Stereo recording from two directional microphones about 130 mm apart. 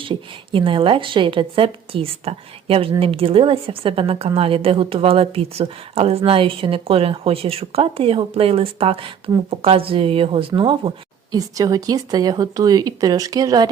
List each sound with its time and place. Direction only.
0.0 s a woman's voice: 40° right (ahead or behind)
11.3 s speech: 30° right (ahead or behind)